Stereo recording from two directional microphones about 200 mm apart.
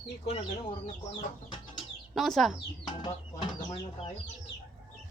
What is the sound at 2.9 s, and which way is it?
Speech, 20° left (ahead or behind).